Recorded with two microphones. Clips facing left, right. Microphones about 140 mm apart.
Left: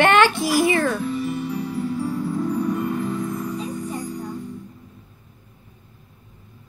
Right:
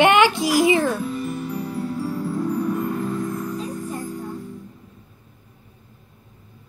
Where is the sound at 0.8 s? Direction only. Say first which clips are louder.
Left 1 dB; centre (ahead or behind).